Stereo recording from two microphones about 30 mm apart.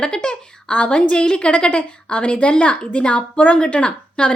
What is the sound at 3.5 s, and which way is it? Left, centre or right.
Speech, left.